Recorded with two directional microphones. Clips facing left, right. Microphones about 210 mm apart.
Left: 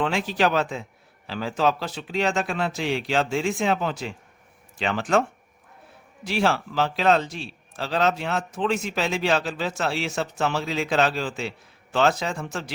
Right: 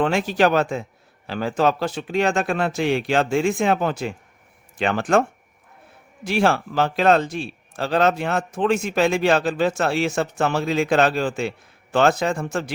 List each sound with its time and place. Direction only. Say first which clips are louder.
0.0 s a man's voice: right 4 dB; 50° right (ahead or behind)
6.2 s a man's voice: right 4 dB; 50° right (ahead or behind)